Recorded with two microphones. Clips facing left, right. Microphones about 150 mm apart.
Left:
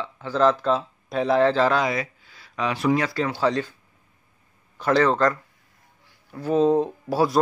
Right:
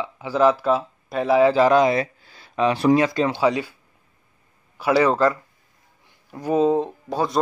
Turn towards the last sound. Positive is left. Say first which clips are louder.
# left 2 dB
turn(degrees=5)  # may be behind; listen again after turning